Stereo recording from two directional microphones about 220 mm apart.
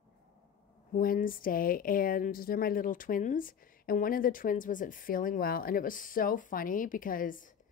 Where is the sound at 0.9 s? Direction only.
40° left (ahead or behind).